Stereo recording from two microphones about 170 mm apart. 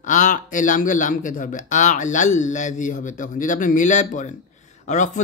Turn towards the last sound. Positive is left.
turn(degrees=45)  # may be behind; listen again after turning